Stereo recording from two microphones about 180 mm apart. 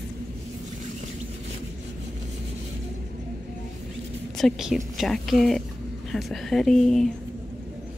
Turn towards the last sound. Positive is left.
turn(degrees=0)  # may be behind; listen again after turning